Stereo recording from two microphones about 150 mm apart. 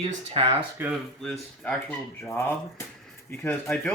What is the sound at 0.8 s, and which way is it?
Speech, 15° right (ahead or behind).